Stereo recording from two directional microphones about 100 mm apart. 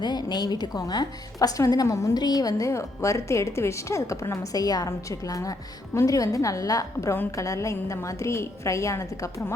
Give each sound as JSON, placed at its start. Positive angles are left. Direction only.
{"t": 0.0, "sound": "a woman's voice", "side_deg": 45}